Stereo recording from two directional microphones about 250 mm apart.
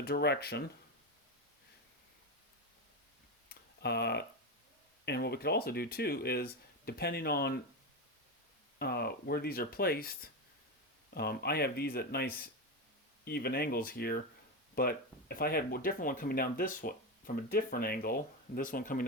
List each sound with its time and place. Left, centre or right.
0.0 s speech: left
3.5 s tick: left
5.0 s speech: left
8.8 s speech: left